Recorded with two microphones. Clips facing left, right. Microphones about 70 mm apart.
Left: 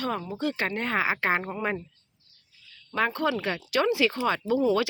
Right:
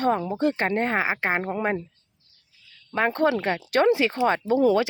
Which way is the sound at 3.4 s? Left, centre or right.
Right.